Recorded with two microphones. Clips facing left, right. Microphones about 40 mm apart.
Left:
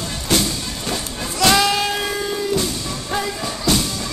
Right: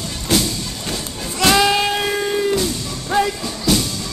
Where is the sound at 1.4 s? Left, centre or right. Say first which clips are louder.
Right 1 dB; centre.